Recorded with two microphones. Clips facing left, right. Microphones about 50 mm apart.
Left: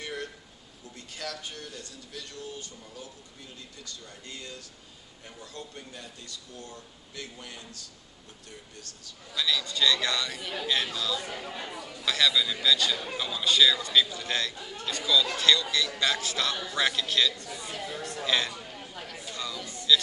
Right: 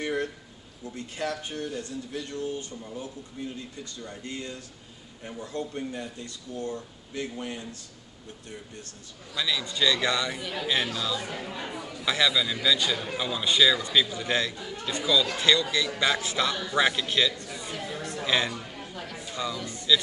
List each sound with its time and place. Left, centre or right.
0.0 s a sound: right
0.9 s speech: right
10.4 s speech: centre
10.7 s speech: centre
14.5 s speech: centre
14.9 s speech: centre
17.4 s chatter: centre
18.2 s a sound: centre
19.3 s music: centre
19.6 s speech: centre